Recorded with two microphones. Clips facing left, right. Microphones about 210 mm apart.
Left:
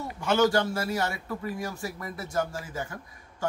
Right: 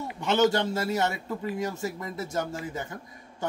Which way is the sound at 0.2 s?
20° right (ahead or behind).